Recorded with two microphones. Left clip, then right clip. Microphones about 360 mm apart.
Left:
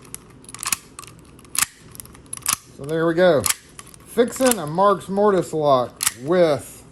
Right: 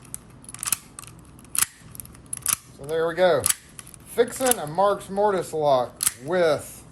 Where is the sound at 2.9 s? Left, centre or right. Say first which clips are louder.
Left 4 dB; left.